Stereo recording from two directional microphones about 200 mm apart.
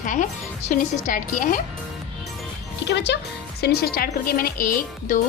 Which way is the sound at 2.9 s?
60° left (ahead or behind).